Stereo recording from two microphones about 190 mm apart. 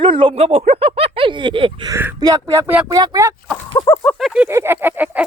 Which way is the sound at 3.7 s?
20° left (ahead or behind).